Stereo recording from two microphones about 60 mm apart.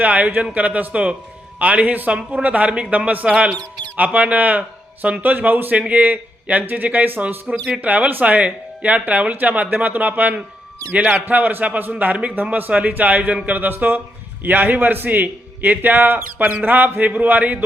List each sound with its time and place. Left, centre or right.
0.0 s a man's voice: right